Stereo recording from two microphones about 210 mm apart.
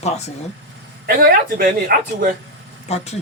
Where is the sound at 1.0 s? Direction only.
45° right (ahead or behind).